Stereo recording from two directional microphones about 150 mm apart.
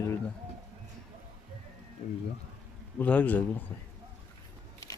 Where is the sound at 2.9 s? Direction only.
10° left (ahead or behind).